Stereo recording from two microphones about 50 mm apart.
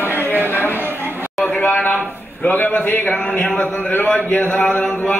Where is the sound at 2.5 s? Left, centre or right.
Left.